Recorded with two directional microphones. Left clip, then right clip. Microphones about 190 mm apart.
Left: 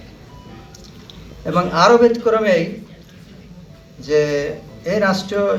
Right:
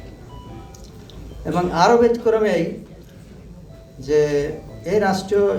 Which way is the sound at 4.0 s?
80° right.